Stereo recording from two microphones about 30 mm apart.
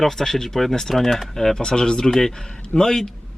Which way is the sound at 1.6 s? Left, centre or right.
Left.